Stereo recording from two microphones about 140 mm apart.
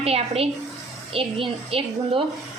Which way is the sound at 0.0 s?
45° right (ahead or behind).